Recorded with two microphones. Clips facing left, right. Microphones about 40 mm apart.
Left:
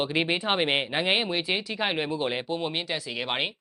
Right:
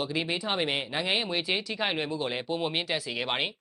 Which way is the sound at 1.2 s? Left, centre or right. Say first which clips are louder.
Left 2 dB; centre.